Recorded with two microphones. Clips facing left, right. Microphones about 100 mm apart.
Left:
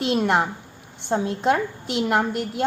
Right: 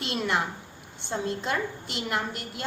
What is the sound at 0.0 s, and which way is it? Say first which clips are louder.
A woman's voice: left 7 dB; 55° left (ahead or behind).